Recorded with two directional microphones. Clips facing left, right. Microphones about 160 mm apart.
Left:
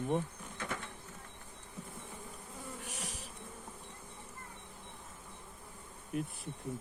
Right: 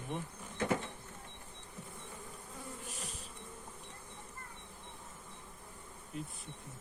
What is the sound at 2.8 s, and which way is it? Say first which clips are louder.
Bee: left 2 dB; 80° left.